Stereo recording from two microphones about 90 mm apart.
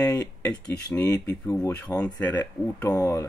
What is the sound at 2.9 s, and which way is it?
Speech, 35° left (ahead or behind).